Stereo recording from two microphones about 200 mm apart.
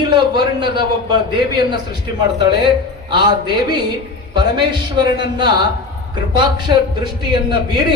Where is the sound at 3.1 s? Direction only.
20° right (ahead or behind).